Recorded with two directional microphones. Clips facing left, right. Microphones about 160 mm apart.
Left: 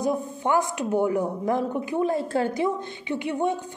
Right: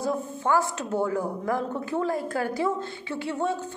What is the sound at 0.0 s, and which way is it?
A woman's voice, 15° left (ahead or behind).